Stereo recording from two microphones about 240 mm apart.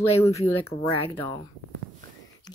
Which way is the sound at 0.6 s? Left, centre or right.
Left.